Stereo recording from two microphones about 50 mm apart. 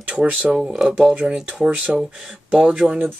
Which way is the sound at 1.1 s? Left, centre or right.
Right.